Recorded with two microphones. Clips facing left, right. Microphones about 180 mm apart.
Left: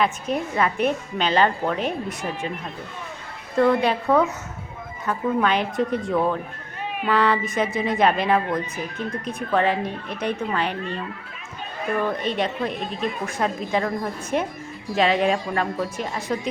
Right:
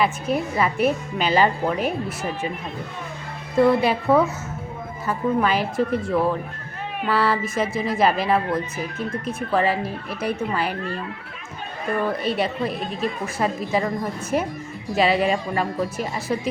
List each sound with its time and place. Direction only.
0.0 s a woman's voice: 5° right (ahead or behind)
3.6 s a woman's voice: 10° right (ahead or behind)
12.0 s speech: 5° right (ahead or behind)